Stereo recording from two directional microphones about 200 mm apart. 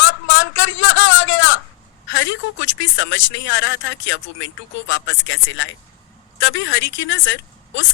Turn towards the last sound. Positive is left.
turn(degrees=70)  # may be behind; listen again after turning